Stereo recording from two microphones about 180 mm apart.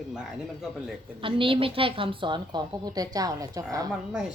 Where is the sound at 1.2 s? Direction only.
30° right (ahead or behind).